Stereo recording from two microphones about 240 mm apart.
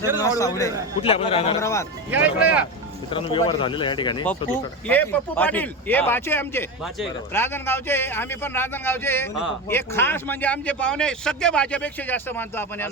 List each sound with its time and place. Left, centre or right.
0.2 s speech: centre
1.0 s a man's voice: left
2.0 s speech: centre
3.1 s a man's voice: left
4.9 s speech: centre